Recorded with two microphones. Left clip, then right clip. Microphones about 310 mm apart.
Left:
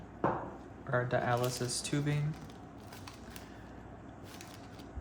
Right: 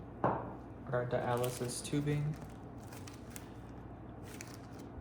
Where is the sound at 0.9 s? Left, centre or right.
Left.